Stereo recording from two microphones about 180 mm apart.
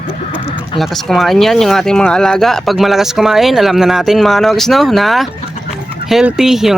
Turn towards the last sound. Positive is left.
turn(degrees=0)  # may be behind; listen again after turning